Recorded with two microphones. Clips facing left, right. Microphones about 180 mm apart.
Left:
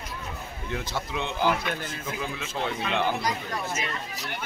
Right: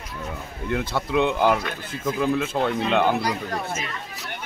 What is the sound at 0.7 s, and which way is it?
Speech, 60° right (ahead or behind).